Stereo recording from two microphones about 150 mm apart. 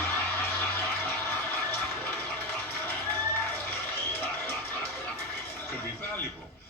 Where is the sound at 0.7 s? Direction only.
15° left (ahead or behind).